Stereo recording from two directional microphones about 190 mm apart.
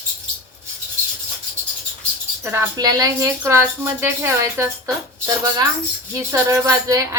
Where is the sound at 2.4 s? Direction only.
10° right (ahead or behind).